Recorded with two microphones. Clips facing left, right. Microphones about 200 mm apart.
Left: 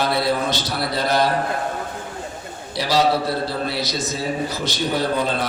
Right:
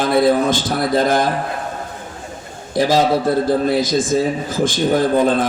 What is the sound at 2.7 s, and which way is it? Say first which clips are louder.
Mantra: right 4 dB; 50° right (ahead or behind).